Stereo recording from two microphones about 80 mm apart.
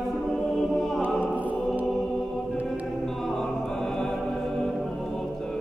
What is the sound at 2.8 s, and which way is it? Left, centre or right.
Music, centre.